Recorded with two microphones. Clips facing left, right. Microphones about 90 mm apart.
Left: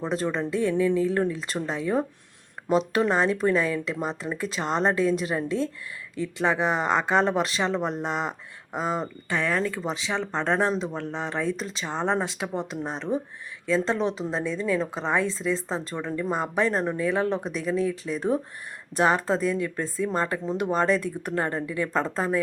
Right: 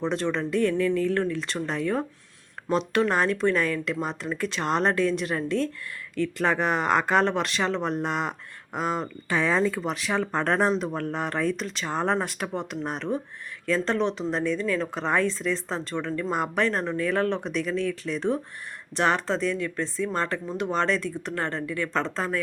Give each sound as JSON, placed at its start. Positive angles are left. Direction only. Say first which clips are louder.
{"t": 0.0, "sound": "speech", "louder": "even", "side_deg": 5}
{"t": 0.8, "sound": "speech", "louder": "left 1 dB", "side_deg": 15}
{"t": 4.0, "sound": "speech", "louder": "even", "side_deg": 0}
{"t": 9.3, "sound": "speech", "louder": "right 3 dB", "side_deg": -10}
{"t": 19.5, "sound": "speech", "louder": "left 1 dB", "side_deg": 20}